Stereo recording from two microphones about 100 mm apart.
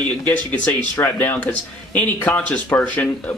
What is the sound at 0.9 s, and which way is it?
Speech, 20° left (ahead or behind).